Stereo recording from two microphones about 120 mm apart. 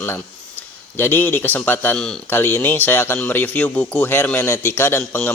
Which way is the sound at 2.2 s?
15° left (ahead or behind).